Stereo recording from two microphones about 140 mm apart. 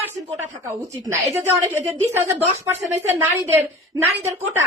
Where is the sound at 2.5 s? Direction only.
15° right (ahead or behind).